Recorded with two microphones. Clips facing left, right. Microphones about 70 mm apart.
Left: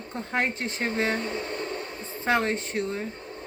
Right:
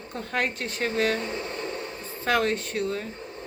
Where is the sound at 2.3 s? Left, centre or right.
Left.